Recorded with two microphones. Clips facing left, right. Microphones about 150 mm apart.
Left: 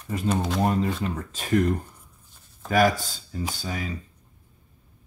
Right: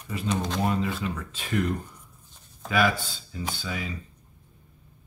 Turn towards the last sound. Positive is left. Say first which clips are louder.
# left 2 dB
turn(degrees=40)  # may be behind; listen again after turning